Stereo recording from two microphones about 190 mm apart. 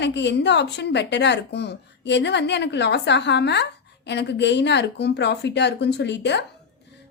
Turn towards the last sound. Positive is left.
turn(degrees=65)  # may be behind; listen again after turning